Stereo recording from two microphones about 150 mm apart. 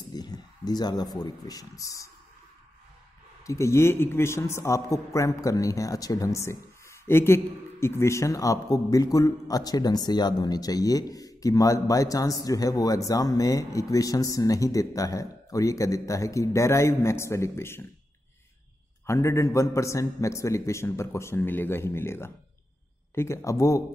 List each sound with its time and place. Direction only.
0.1 s speech: 25° left (ahead or behind)
3.4 s a man's voice: 20° left (ahead or behind)
19.0 s a man's voice: 20° left (ahead or behind)